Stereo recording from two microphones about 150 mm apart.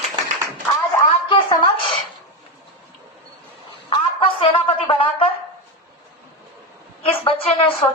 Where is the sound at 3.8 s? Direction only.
35° left (ahead or behind).